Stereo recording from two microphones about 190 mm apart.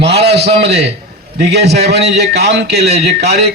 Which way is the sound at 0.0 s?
60° right (ahead or behind).